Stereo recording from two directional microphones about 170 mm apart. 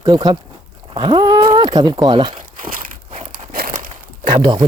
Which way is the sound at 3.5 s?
55° right (ahead or behind).